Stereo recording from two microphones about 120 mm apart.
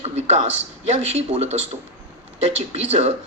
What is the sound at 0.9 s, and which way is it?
Speech, 65° right (ahead or behind).